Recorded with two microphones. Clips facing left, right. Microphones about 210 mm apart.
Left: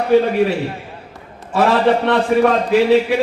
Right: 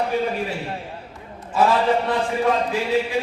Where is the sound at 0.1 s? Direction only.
80° left.